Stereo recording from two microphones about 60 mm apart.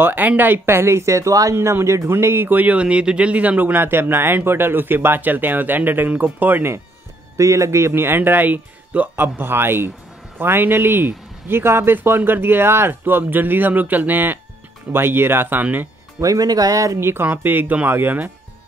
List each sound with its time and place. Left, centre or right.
0.0 s speech: right
1.5 s speech: right
7.3 s speech: right
16.2 s speech: right
17.0 s speech: right